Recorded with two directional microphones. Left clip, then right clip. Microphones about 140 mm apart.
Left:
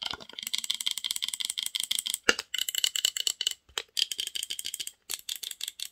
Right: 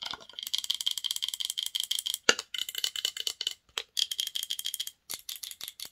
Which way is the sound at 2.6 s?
25° left (ahead or behind).